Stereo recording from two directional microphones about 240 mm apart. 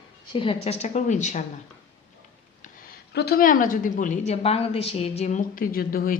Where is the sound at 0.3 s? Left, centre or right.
Left.